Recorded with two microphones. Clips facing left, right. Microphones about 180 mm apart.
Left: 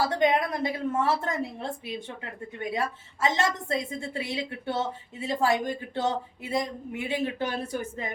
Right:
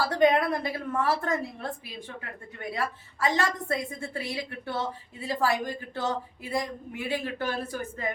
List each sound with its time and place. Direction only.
0.0 s a woman's voice: 20° left (ahead or behind)